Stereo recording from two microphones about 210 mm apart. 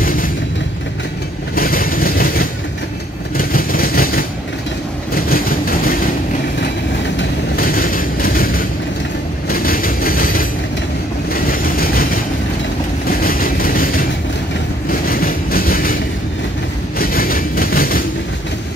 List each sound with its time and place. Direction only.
0.0 s vehicle: 40° left (ahead or behind)
1.5 s vehicle: 45° left (ahead or behind)
7.5 s vehicle: 45° left (ahead or behind)
9.5 s train: 45° left (ahead or behind)
11.3 s vehicle: 45° left (ahead or behind)
17.0 s vehicle: 45° left (ahead or behind)